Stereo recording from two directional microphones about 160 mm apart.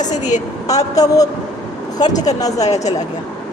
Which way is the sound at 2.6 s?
45° left (ahead or behind).